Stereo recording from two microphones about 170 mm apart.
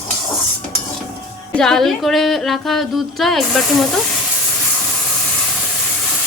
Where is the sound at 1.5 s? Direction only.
5° left (ahead or behind).